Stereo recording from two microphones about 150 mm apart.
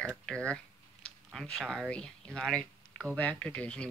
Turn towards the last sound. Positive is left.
turn(degrees=5)  # may be behind; listen again after turning